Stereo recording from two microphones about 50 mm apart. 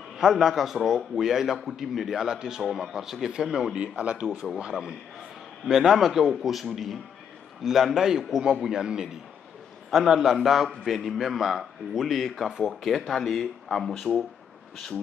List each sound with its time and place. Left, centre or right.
0.2 s a man's voice: centre
4.0 s speech: right
5.7 s a man's voice: centre